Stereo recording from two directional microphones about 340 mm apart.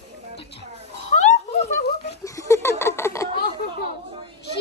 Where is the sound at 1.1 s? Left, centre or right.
Left.